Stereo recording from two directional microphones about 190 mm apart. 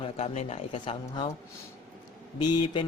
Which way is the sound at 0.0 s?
30° left (ahead or behind).